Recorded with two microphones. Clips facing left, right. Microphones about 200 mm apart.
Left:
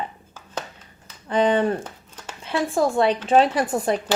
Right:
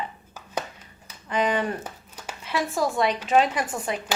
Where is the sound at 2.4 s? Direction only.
30° left (ahead or behind).